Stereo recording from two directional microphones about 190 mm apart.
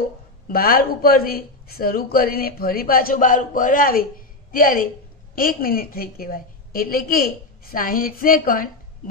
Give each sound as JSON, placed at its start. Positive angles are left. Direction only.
{"t": 0.5, "sound": "speech", "side_deg": 50}